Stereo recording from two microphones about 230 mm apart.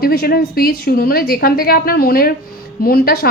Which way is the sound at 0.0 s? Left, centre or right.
Left.